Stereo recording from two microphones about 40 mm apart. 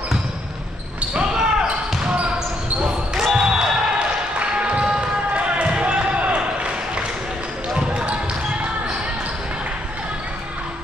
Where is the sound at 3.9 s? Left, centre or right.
Right.